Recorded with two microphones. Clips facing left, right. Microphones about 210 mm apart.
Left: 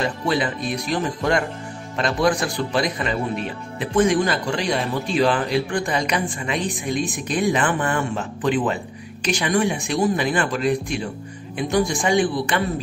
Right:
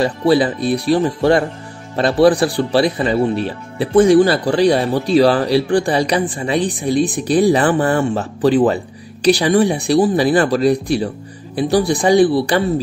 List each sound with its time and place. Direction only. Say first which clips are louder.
0.0 s speech: right 8 dB; 35° right (ahead or behind)